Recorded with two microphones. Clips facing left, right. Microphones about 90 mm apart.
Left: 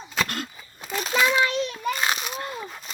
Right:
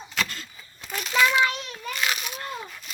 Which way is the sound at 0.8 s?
25° left (ahead or behind).